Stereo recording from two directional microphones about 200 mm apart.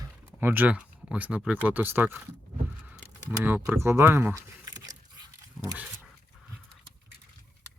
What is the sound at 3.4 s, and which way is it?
Speech, 10° right (ahead or behind).